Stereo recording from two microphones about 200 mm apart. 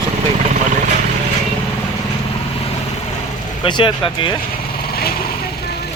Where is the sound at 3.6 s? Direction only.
25° left (ahead or behind).